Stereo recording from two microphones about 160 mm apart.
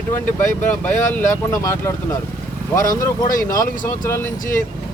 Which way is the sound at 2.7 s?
60° left (ahead or behind).